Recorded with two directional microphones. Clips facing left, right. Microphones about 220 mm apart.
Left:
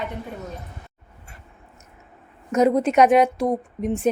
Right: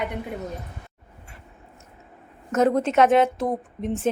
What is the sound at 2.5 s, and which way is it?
Speech, 10° left (ahead or behind).